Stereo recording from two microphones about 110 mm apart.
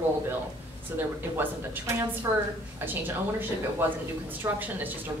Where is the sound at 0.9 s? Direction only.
20° right (ahead or behind).